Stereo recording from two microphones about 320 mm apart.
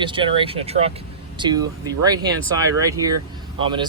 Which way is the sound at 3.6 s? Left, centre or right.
Centre.